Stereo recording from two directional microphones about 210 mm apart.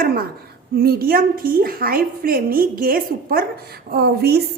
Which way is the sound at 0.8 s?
45° right (ahead or behind).